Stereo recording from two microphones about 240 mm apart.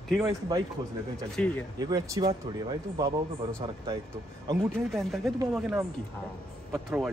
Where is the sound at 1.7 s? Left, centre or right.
Centre.